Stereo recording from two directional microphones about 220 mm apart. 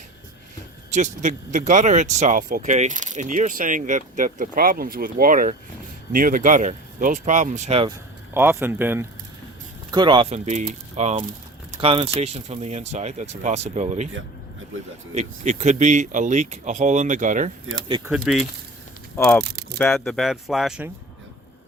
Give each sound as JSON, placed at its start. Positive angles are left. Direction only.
{"t": 0.9, "sound": "speech", "side_deg": -35}
{"t": 8.3, "sound": "speech", "side_deg": -10}
{"t": 15.1, "sound": "speech", "side_deg": -30}
{"t": 17.8, "sound": "speech", "side_deg": -20}
{"t": 18.1, "sound": "speech", "side_deg": 0}
{"t": 19.1, "sound": "speech", "side_deg": 10}